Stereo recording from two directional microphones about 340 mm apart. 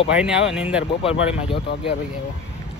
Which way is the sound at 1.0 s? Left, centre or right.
Centre.